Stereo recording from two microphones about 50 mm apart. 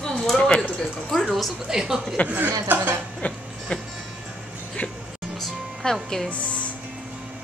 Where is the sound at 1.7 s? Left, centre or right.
Centre.